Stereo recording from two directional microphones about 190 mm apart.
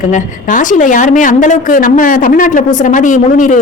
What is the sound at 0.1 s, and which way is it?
A woman's voice, 40° left (ahead or behind).